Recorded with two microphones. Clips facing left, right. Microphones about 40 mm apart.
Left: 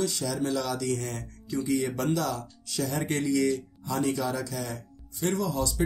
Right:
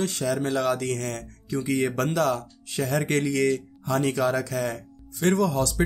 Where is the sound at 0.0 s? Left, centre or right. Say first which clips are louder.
Right 3 dB; right.